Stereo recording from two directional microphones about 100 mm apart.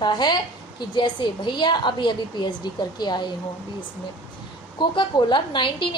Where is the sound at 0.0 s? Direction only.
45° left (ahead or behind).